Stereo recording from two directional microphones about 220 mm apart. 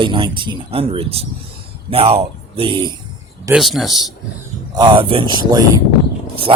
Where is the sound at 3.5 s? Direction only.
Centre (ahead or behind).